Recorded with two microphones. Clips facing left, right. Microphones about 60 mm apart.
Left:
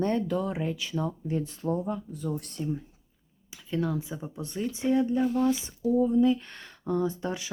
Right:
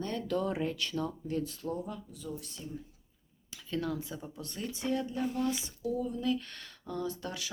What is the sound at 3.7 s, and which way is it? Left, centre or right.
Speech, centre.